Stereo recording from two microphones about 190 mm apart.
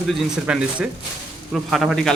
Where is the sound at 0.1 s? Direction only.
5° right (ahead or behind).